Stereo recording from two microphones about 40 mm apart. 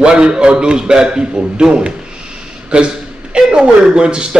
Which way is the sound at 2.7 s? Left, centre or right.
Right.